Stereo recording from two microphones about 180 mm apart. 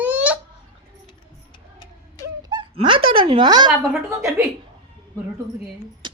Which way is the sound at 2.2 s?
25° right (ahead or behind).